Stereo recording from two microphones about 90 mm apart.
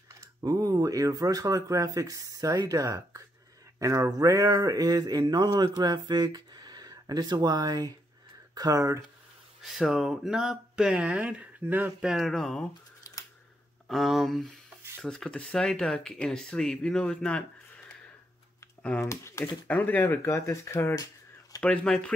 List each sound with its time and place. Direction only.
0.2 s speech: 40° right (ahead or behind)
8.5 s speech: 40° right (ahead or behind)
9.6 s speech: 5° right (ahead or behind); by 11.9 s 20° right (ahead or behind)
12.0 s speech: 5° right (ahead or behind)
13.8 s speech: centre (ahead or behind); by 19.0 s 15° left (ahead or behind)
19.0 s speech: 30° left (ahead or behind)
19.7 s speech: 20° left (ahead or behind)
21.6 s speech: 10° left (ahead or behind)